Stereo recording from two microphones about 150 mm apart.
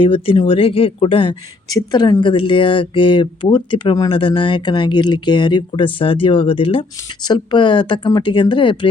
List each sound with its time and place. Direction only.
0.0 s speech: 35° left (ahead or behind)